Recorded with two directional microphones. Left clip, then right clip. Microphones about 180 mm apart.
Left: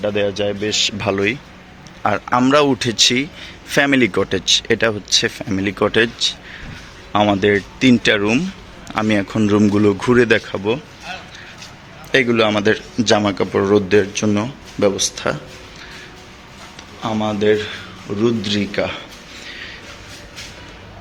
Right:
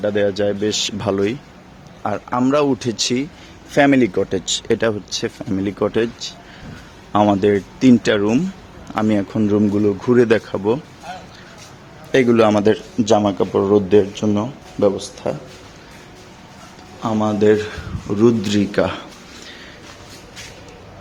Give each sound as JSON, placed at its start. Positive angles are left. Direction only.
{"t": 0.0, "sound": "speech", "side_deg": -30}
{"t": 2.0, "sound": "speech", "side_deg": 0}
{"t": 3.7, "sound": "speech", "side_deg": 0}
{"t": 4.3, "sound": "speech", "side_deg": -15}
{"t": 7.1, "sound": "speech", "side_deg": -25}
{"t": 10.2, "sound": "speech", "side_deg": -25}
{"t": 12.1, "sound": "speech", "side_deg": -30}
{"t": 17.0, "sound": "a man's voice", "side_deg": -35}